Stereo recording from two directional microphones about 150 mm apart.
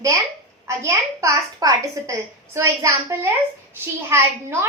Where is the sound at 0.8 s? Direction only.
20° right (ahead or behind).